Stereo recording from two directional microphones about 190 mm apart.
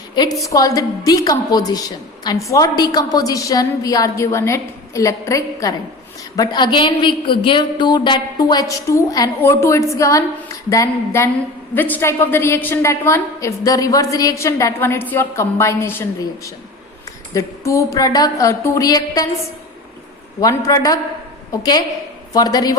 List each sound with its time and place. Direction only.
0.4 s a woman's voice: 20° left (ahead or behind)
17.3 s a woman's voice: 15° left (ahead or behind)
20.4 s a woman's voice: 15° left (ahead or behind)